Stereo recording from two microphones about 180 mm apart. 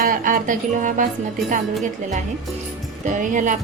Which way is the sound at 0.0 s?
50° right (ahead or behind).